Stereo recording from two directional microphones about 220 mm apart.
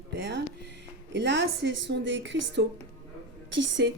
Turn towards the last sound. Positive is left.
turn(degrees=-55)  # may be behind; listen again after turning